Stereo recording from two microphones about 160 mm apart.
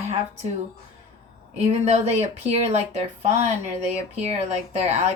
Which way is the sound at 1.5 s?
45° right (ahead or behind).